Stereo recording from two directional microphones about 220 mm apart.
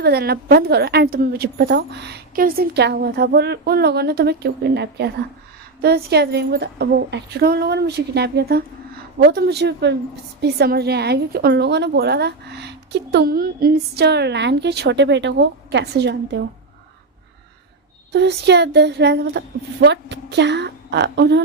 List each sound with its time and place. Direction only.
0.0 s a woman's voice: 45° right (ahead or behind)
18.1 s a woman's voice: 50° right (ahead or behind)